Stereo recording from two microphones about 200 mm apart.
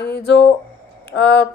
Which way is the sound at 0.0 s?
60° left (ahead or behind).